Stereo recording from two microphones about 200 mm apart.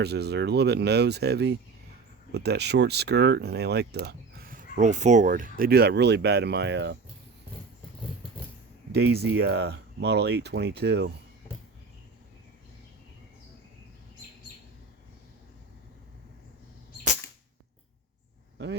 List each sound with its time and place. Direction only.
0.0 s speech: 55° right (ahead or behind)
8.9 s speech: 55° right (ahead or behind)
18.5 s a sound: 60° right (ahead or behind)